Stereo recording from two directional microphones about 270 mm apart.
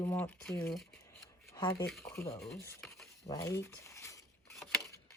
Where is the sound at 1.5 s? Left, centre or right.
Centre.